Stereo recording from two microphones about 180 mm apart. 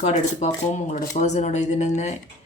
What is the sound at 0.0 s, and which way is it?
Speech, 40° left (ahead or behind).